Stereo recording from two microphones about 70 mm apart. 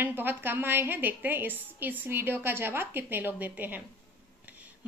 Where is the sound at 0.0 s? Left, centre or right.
Right.